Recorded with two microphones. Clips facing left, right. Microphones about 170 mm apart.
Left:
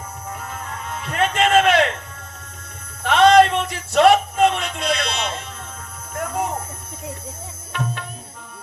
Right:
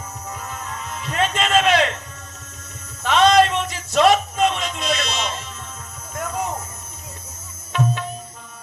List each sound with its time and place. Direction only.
0.3 s music: 55° left (ahead or behind)
3.0 s a sound: 60° left (ahead or behind)
6.1 s music: 60° left (ahead or behind)